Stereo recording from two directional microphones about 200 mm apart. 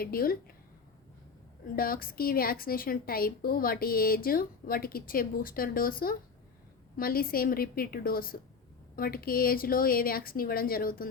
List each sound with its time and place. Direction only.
0.0 s a woman's voice: 45° left (ahead or behind)
1.6 s a woman's voice: 45° left (ahead or behind)